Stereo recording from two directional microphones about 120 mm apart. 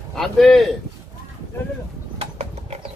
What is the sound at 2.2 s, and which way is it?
Horse, 60° right (ahead or behind).